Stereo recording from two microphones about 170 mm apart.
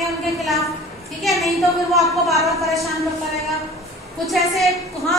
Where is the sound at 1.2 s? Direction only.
Centre (ahead or behind).